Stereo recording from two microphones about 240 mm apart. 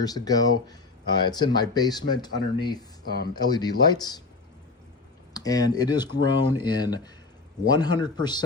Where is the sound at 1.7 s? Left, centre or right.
Centre.